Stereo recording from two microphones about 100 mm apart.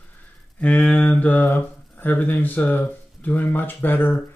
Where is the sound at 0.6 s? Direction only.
15° left (ahead or behind).